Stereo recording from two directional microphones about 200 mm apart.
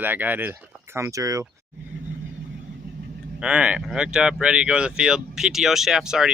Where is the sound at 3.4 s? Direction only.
5° right (ahead or behind).